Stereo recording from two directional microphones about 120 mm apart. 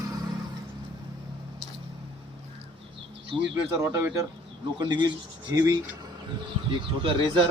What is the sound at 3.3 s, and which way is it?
Speech, 45° right (ahead or behind).